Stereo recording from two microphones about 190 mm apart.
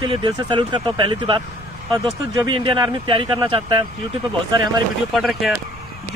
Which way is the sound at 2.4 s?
25° right (ahead or behind).